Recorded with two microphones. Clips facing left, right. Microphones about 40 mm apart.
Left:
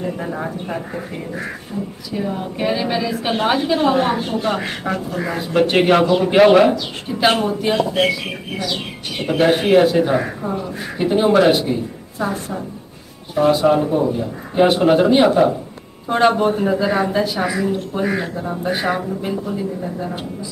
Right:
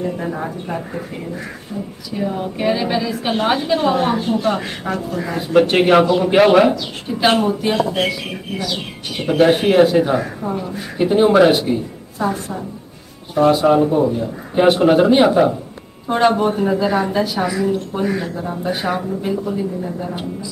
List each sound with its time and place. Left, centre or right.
0.2 s speech: centre
5.3 s speech: centre
9.2 s speech: centre